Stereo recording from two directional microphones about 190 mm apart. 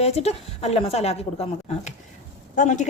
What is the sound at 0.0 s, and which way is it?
A woman's voice, 35° left (ahead or behind).